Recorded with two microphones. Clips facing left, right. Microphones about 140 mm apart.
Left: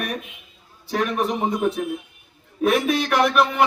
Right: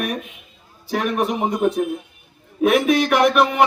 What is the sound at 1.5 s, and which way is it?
A man's voice, centre (ahead or behind).